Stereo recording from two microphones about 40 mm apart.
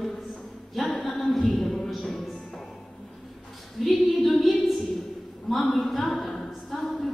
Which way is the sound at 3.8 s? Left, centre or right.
Centre.